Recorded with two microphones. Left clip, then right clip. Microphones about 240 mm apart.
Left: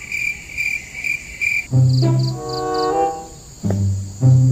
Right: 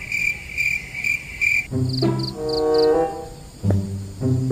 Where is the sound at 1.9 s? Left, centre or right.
Right.